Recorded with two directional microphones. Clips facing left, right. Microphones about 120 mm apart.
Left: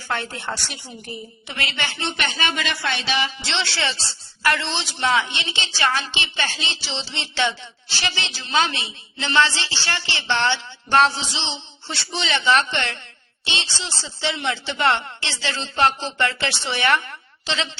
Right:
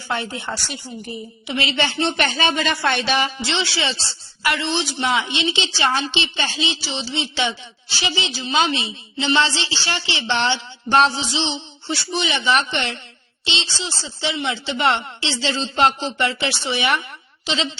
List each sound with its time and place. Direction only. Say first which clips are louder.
0.1 s a woman's voice: right 2 dB; 10° right (ahead or behind)
1.5 s speech: right 7 dB; 20° right (ahead or behind); by 3.4 s 45° right (ahead or behind)
3.5 s a woman's voice: right 2 dB; 10° right (ahead or behind)
5.1 s a woman's voice: right 2 dB; 20° right (ahead or behind)
11.9 s a woman's voice: right 3 dB; 5° right (ahead or behind)